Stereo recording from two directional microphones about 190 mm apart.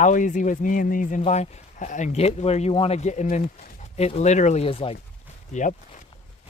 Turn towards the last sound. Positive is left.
turn(degrees=40)  # may be behind; listen again after turning